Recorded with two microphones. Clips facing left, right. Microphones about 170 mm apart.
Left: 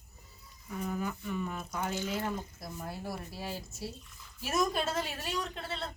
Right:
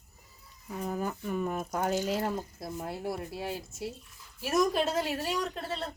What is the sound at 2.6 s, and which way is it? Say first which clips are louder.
Speech: right 5 dB; 25° right (ahead or behind).